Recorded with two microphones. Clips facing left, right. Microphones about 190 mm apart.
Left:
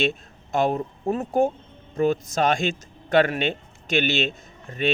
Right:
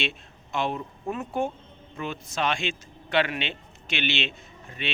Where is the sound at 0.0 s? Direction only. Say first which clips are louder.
Left 8 dB; 45° left (ahead or behind).